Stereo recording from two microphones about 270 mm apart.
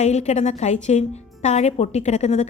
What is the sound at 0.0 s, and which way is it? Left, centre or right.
A woman's voice, left.